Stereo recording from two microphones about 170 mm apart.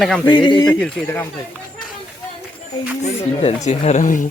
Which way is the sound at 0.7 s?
5° left (ahead or behind).